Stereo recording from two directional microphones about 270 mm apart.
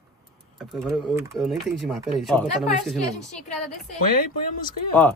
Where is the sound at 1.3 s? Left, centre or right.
Centre.